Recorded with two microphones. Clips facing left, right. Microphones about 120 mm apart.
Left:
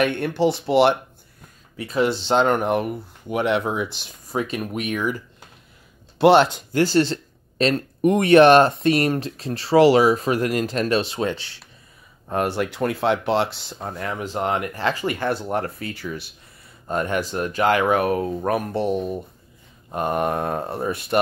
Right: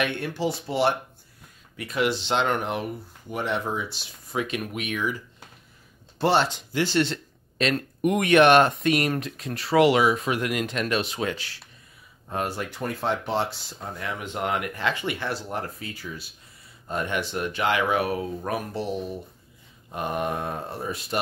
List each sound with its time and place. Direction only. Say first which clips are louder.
0.0 s speech: left 7 dB; 60° left (ahead or behind)
1.8 s speech: left 4 dB; 30° left (ahead or behind); by 4.1 s 60° left (ahead or behind)
4.3 s speech: left 3 dB; 40° left (ahead or behind)
6.1 s speech: left 8 dB; 70° left (ahead or behind)
6.7 s speech: left 3 dB; 40° left (ahead or behind)
12.3 s speech: left 6 dB; 65° left (ahead or behind); by 14.1 s 50° left (ahead or behind)
14.1 s speech: left 4 dB; 35° left (ahead or behind); by 16.3 s 70° left (ahead or behind)
16.8 s speech: left 5 dB; 45° left (ahead or behind); by 21.2 s 60° left (ahead or behind)